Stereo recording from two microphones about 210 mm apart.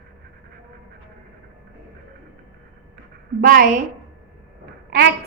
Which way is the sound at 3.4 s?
40° right (ahead or behind).